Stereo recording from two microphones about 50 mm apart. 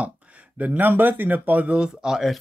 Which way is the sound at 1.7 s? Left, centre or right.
Centre.